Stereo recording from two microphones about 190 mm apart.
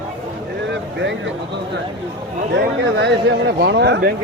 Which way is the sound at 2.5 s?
65° right (ahead or behind).